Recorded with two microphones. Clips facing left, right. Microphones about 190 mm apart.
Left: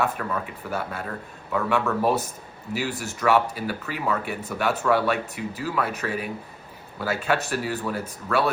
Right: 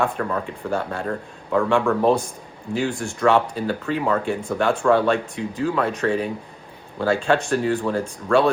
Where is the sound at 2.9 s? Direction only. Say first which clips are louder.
Right 4 dB; 5° left (ahead or behind).